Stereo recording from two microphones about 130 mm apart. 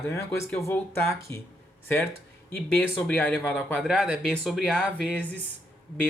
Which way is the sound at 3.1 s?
10° left (ahead or behind).